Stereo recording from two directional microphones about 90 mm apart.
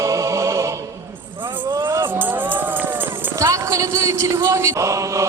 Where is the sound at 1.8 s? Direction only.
25° right (ahead or behind).